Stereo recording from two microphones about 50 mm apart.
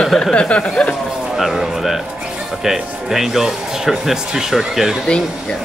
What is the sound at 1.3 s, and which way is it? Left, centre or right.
Speech, centre.